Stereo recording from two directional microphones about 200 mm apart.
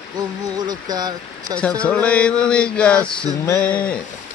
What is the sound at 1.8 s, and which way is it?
Mantra, 5° left (ahead or behind).